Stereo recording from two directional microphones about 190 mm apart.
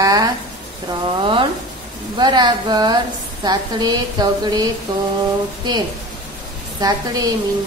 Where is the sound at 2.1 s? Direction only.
25° right (ahead or behind).